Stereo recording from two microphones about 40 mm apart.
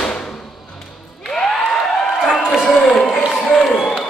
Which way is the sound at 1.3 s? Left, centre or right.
Centre.